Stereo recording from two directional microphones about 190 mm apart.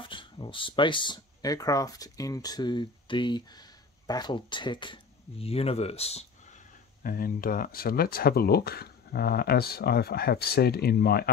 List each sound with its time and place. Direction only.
0.1 s speech: 25° left (ahead or behind)
7.0 s speech: 50° left (ahead or behind)